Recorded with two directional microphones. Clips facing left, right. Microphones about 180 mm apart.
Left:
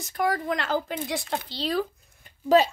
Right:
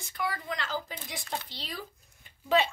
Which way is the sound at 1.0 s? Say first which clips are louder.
Left 8 dB; 80° left.